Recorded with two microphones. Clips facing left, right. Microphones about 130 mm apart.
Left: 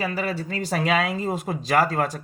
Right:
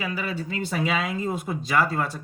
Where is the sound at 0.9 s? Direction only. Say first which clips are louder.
Left 6 dB; 80° left.